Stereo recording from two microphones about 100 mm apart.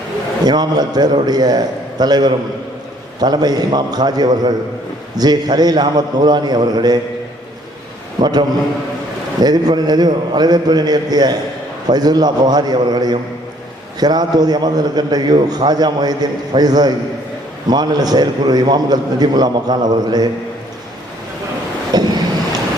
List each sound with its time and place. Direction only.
0.4 s a man's voice: 45° right (ahead or behind)
8.2 s a man's voice: 45° right (ahead or behind)
21.9 s wind noise: 40° right (ahead or behind)